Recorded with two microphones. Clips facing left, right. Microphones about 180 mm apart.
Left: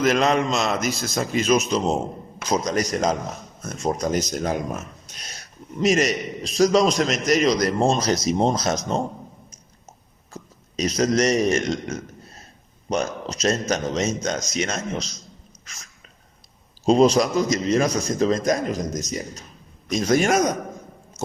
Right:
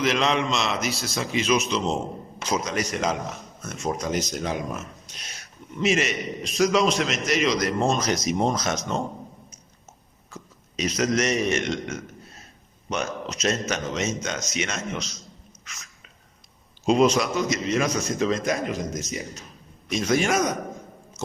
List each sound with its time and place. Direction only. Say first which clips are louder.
0.0 s a man's voice: left 4 dB; 45° left (ahead or behind)
10.3 s a man's voice: left 3 dB; 35° left (ahead or behind)
21.2 s a sound: left 4 dB; 20° left (ahead or behind)